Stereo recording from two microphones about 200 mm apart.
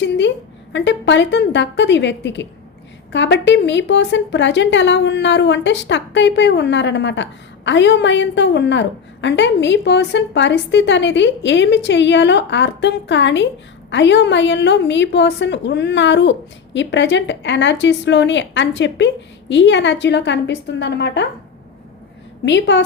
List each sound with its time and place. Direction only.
0.0 s a sound: 65° left (ahead or behind)
0.7 s a woman's voice: 65° left (ahead or behind)
22.4 s a woman's voice: 65° left (ahead or behind)